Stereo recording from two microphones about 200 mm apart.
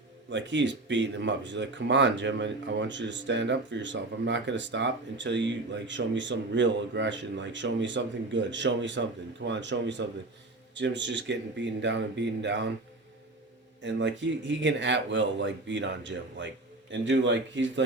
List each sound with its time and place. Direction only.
0.3 s speech: 65° right (ahead or behind)
13.8 s speech: 65° right (ahead or behind)